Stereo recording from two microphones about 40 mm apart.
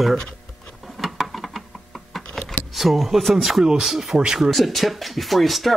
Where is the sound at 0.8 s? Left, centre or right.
Centre.